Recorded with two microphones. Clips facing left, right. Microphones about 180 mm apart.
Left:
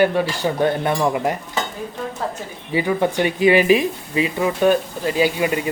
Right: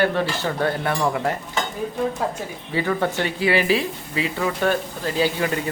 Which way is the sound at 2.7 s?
15° left (ahead or behind).